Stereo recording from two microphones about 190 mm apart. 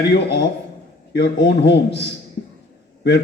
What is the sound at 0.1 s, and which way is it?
A man's voice, 55° left (ahead or behind).